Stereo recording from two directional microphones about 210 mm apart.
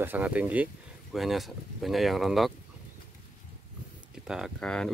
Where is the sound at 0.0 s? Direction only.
10° right (ahead or behind).